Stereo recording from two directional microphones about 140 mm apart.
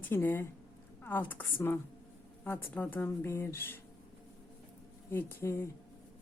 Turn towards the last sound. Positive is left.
turn(degrees=15)  # may be behind; listen again after turning